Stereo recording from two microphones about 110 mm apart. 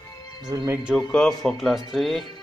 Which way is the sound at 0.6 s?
10° right (ahead or behind).